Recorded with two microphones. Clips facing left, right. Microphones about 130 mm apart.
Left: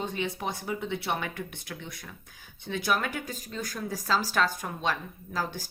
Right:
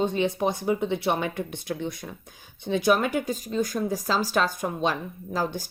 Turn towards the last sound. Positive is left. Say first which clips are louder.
# right 5 dB
turn(degrees=-20)  # may be behind; listen again after turning